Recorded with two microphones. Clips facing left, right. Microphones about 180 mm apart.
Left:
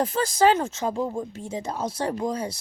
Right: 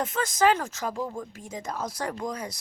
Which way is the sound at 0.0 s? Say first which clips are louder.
Left 3 dB; 30° left (ahead or behind).